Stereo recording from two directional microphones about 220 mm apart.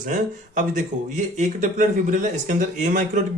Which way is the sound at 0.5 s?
35° right (ahead or behind).